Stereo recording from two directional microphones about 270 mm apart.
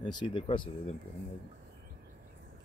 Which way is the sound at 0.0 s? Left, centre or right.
Centre.